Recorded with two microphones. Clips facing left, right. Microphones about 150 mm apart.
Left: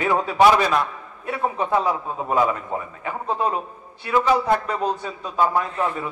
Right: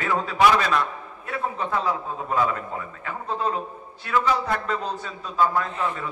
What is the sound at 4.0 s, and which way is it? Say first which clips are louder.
A man's voice: left 4 dB; 20° left (ahead or behind).